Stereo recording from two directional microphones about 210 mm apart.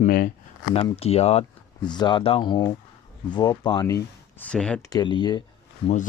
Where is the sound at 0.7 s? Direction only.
30° left (ahead or behind); by 4.9 s 5° left (ahead or behind).